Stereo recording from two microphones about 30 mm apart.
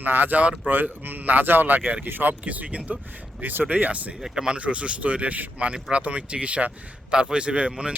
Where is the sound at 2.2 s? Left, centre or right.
Right.